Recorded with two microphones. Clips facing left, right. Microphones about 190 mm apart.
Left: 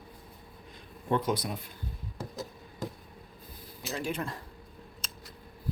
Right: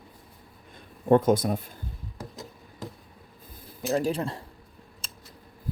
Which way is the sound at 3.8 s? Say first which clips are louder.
Right 8 dB; 45° right (ahead or behind).